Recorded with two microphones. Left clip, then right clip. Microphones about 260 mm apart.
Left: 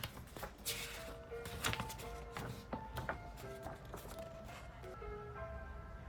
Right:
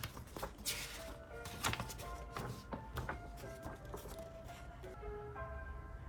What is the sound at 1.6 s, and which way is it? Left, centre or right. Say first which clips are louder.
Music: right 1 dB; centre.